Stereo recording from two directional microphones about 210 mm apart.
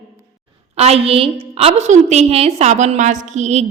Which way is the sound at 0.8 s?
30° right (ahead or behind).